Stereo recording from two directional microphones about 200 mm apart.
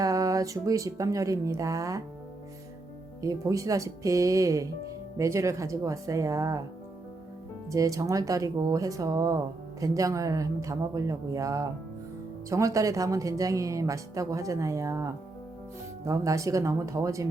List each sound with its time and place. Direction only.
0.0 s speech: 15° right (ahead or behind)
3.2 s speech: 15° right (ahead or behind)
7.7 s speech: 15° right (ahead or behind)